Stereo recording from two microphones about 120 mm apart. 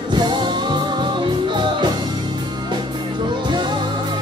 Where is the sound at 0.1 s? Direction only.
40° right (ahead or behind).